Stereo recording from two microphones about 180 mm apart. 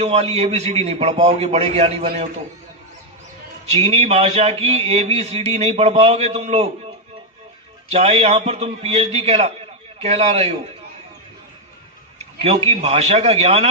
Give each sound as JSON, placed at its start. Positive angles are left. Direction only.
{"t": 0.0, "sound": "speech", "side_deg": -35}
{"t": 3.7, "sound": "speech", "side_deg": -35}
{"t": 7.9, "sound": "speech", "side_deg": -35}
{"t": 12.4, "sound": "speech", "side_deg": -30}